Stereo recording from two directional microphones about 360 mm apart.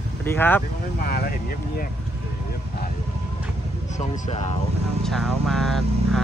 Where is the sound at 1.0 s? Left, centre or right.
Left.